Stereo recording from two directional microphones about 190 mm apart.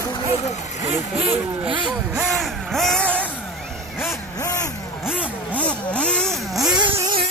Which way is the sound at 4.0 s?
15° left (ahead or behind).